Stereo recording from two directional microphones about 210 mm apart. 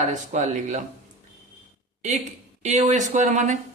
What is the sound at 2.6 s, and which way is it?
Speech, 35° right (ahead or behind).